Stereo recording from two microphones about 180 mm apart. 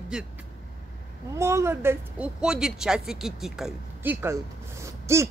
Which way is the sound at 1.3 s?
15° right (ahead or behind).